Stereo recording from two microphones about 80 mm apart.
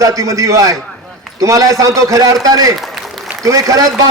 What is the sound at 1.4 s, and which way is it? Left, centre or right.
A man's voice, right.